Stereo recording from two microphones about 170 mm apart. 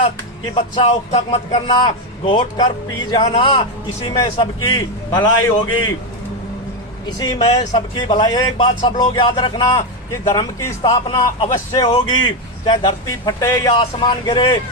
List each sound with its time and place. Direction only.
0.5 s speech: 40° left (ahead or behind)
1.5 s speech: 25° left (ahead or behind)
7.2 s speech: 25° left (ahead or behind)